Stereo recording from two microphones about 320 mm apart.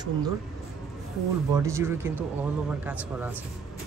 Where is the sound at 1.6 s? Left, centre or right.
Centre.